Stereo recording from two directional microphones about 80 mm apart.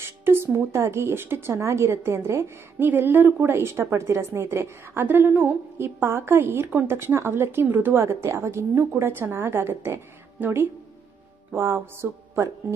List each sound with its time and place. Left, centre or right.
0.0 s a woman's voice: right
7.9 s a woman's voice: right